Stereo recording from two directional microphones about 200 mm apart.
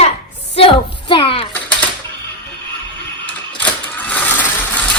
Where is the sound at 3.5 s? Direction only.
5° left (ahead or behind).